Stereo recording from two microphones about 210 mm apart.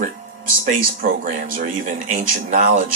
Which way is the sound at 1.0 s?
40° right (ahead or behind).